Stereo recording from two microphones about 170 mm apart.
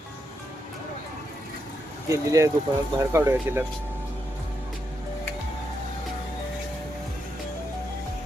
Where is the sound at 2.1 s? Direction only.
20° right (ahead or behind).